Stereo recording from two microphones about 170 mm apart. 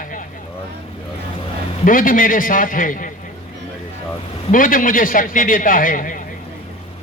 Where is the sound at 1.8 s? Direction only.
55° left (ahead or behind).